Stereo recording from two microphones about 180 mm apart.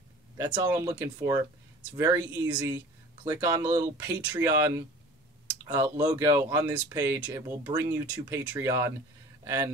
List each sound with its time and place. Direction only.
0.7 s speech: 15° right (ahead or behind)